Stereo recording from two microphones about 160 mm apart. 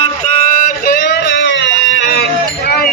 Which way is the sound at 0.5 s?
65° left (ahead or behind).